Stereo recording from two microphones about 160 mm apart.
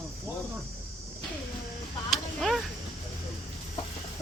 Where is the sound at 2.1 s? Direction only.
Centre (ahead or behind).